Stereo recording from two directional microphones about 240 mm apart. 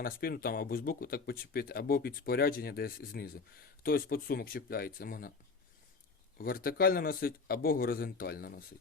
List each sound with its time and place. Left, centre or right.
0.0 s speech: left
6.3 s speech: left